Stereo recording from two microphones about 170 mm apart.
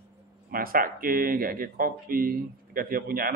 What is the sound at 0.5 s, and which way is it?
Speech, 60° right (ahead or behind).